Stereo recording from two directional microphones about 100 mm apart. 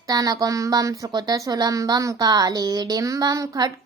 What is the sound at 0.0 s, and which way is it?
A woman's voice, 40° right (ahead or behind).